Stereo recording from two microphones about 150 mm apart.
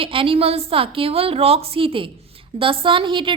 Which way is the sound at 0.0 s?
35° right (ahead or behind).